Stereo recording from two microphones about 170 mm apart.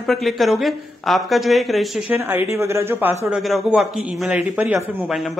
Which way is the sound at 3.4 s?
Centre (ahead or behind).